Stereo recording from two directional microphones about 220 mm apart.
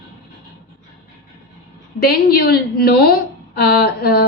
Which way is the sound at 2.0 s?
45° left (ahead or behind).